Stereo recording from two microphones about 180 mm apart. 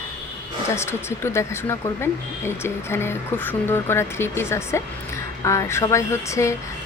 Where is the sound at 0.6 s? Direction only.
15° left (ahead or behind).